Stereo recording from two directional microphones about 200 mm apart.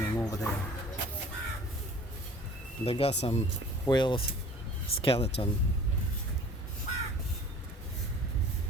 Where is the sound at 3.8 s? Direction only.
20° left (ahead or behind).